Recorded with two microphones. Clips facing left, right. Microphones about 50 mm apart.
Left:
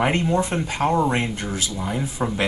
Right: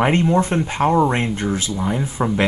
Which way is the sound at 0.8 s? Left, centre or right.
Centre.